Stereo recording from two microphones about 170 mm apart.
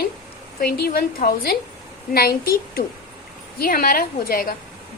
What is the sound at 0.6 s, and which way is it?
A woman's voice, 60° left (ahead or behind).